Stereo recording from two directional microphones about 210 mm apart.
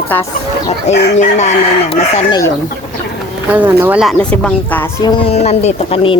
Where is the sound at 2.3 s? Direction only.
15° left (ahead or behind).